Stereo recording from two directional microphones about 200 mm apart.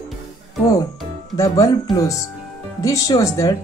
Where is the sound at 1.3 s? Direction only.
15° left (ahead or behind).